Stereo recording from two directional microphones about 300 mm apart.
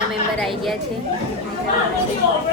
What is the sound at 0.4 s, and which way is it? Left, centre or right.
Speech, centre.